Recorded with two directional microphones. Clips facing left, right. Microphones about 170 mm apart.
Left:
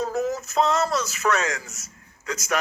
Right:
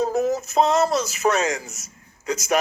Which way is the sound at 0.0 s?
20° right (ahead or behind).